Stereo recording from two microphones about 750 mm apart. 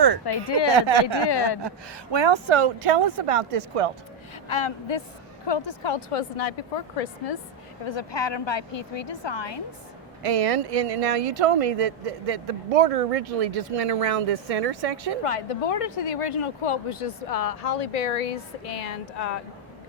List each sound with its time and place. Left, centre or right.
0.3 s a woman's voice: left
0.8 s speech: right
1.3 s speech: left
2.1 s speech: right
4.4 s a woman's voice: left
7.9 s a woman's voice: left
10.2 s speech: right
15.2 s speech: left